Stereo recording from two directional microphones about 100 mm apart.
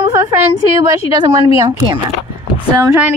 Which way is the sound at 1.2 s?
55° right (ahead or behind).